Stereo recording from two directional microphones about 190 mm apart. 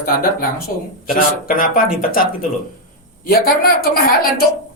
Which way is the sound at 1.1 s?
45° left (ahead or behind).